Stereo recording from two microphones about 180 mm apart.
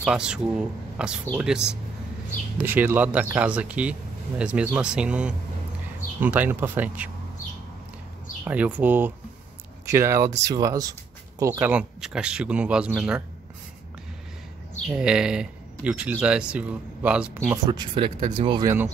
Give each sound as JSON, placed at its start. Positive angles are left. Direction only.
{"t": 0.0, "sound": "speech", "side_deg": -5}
{"t": 2.6, "sound": "speech", "side_deg": -10}
{"t": 8.5, "sound": "speech", "side_deg": -10}
{"t": 14.9, "sound": "speech", "side_deg": -5}
{"t": 17.6, "sound": "speech", "side_deg": -25}